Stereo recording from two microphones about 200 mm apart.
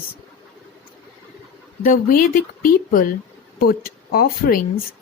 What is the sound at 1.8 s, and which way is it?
A woman's voice, 45° left (ahead or behind).